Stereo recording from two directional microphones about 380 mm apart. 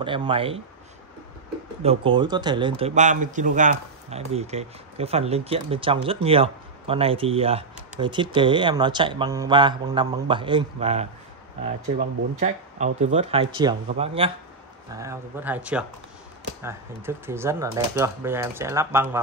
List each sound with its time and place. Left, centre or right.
0.0 s a man's voice: centre
1.8 s a man's voice: centre